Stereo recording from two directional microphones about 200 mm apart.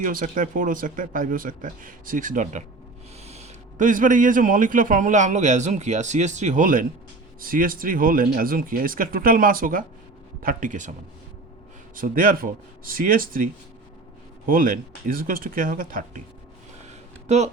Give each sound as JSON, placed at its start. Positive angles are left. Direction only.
{"t": 0.0, "sound": "a man's voice", "side_deg": -45}
{"t": 11.9, "sound": "speech", "side_deg": -45}
{"t": 16.8, "sound": "a sound", "side_deg": -35}